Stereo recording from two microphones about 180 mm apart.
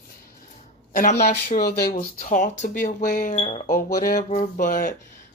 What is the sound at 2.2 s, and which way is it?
Speech, 40° left (ahead or behind).